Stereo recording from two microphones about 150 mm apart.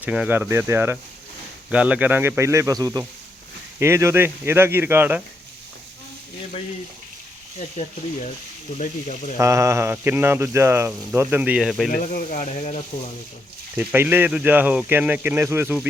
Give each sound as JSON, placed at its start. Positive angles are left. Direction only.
{"t": 0.0, "sound": "speech", "side_deg": -10}
{"t": 7.8, "sound": "speech", "side_deg": 55}
{"t": 9.4, "sound": "speech", "side_deg": -20}
{"t": 11.9, "sound": "speech", "side_deg": 70}
{"t": 13.7, "sound": "speech", "side_deg": -15}